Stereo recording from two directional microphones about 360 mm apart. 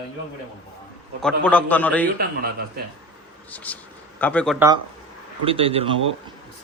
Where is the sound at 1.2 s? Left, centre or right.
Centre.